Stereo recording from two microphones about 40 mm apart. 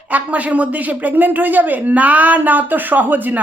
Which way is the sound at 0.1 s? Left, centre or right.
Right.